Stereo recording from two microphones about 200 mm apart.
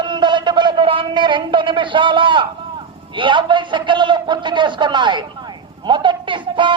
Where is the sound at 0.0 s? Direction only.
20° right (ahead or behind).